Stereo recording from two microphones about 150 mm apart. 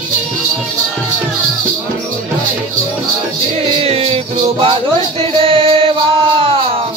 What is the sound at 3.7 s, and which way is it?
Music, 40° right (ahead or behind).